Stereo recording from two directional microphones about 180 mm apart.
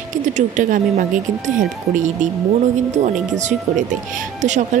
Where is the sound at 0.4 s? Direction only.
45° right (ahead or behind).